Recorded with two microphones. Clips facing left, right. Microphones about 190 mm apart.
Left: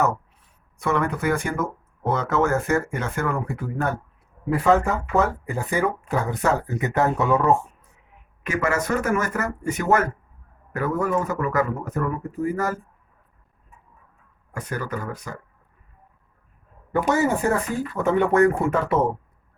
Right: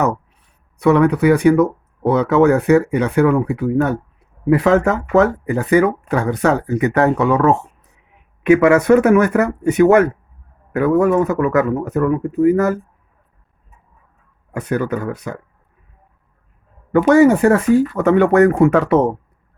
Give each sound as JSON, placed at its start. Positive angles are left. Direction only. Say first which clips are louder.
{"t": 0.8, "sound": "speech", "louder": "right 11 dB", "side_deg": -65}
{"t": 4.4, "sound": "speech", "louder": "right 6 dB", "side_deg": -85}
{"t": 8.4, "sound": "speech", "louder": "right 13 dB", "side_deg": -65}
{"t": 14.7, "sound": "speech", "louder": "right 10 dB", "side_deg": -65}
{"t": 16.9, "sound": "speech", "louder": "right 10 dB", "side_deg": -90}